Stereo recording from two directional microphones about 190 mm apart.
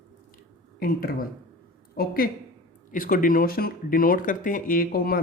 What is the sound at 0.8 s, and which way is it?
Speech, 50° left (ahead or behind).